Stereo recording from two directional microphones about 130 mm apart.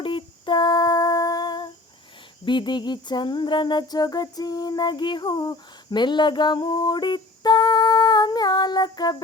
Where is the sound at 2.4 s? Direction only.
35° left (ahead or behind).